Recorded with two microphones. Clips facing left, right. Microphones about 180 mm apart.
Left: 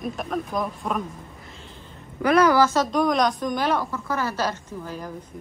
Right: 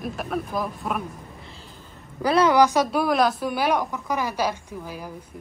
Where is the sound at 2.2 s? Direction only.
25° right (ahead or behind); by 5.1 s 10° right (ahead or behind).